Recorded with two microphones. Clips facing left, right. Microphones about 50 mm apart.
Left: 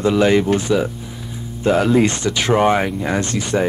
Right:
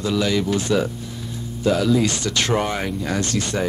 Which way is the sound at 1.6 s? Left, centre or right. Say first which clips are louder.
Left 4 dB; left.